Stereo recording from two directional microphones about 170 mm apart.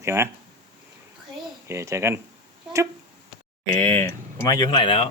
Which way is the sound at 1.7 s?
15° right (ahead or behind).